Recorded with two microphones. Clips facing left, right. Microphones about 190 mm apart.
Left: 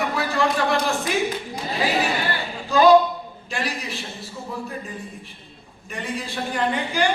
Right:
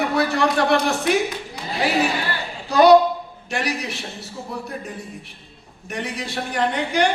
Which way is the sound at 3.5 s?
70° right (ahead or behind).